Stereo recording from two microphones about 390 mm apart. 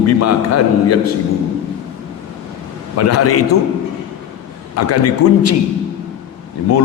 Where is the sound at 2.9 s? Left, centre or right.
Left.